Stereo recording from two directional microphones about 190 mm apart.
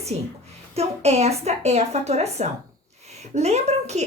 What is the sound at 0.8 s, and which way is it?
A woman's voice, 35° right (ahead or behind).